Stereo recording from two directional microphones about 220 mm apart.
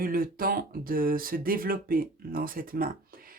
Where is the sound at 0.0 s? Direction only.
40° right (ahead or behind).